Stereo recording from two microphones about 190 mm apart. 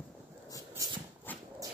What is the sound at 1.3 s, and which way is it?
Dog, 10° left (ahead or behind).